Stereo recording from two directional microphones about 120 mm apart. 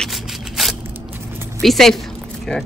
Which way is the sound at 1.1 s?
20° right (ahead or behind).